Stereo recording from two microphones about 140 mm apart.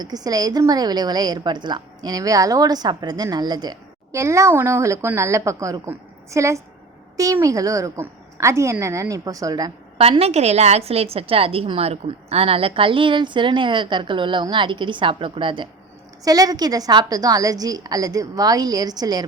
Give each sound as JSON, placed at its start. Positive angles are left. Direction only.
{"t": 0.0, "sound": "a woman's voice", "side_deg": -25}
{"t": 10.0, "sound": "a woman's voice", "side_deg": -45}
{"t": 16.2, "sound": "a woman's voice", "side_deg": -25}